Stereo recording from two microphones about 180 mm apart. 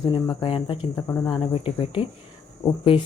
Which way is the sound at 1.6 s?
30° left (ahead or behind).